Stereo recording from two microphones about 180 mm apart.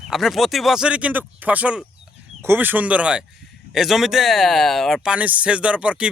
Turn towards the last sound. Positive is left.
turn(degrees=-5)  # may be behind; listen again after turning